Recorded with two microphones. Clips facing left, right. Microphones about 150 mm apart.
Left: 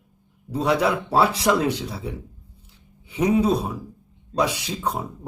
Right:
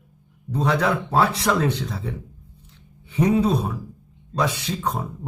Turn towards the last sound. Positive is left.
turn(degrees=10)  # may be behind; listen again after turning